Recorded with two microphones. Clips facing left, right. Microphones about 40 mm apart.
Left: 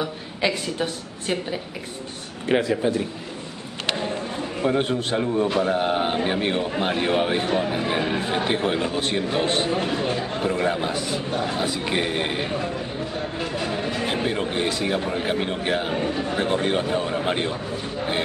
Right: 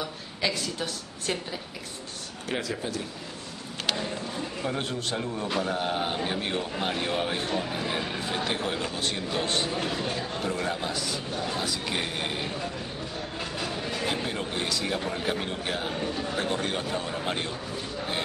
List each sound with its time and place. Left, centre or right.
0.0 s a man's voice: left
9.8 s a man's voice: centre
13.4 s a sound: centre
13.7 s a man's voice: centre